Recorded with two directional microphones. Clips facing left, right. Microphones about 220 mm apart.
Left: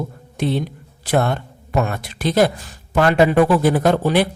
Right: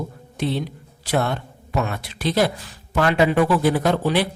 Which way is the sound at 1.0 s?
50° left (ahead or behind).